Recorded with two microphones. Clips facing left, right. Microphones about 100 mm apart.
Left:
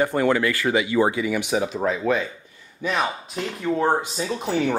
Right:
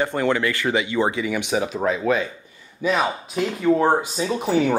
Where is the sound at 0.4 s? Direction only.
25° right (ahead or behind).